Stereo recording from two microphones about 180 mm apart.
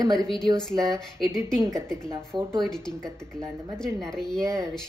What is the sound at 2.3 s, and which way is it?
Speech, 25° right (ahead or behind).